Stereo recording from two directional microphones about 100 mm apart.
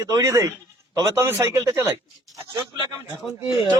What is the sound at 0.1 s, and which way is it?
A man's voice, 35° right (ahead or behind).